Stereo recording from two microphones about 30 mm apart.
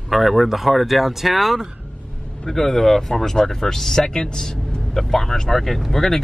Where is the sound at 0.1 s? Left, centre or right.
Centre.